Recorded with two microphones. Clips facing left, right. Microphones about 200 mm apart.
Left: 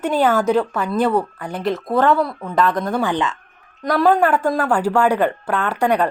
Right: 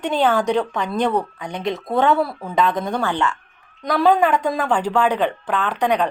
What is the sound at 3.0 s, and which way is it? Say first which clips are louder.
Speech: left 1 dB; 15° left (ahead or behind).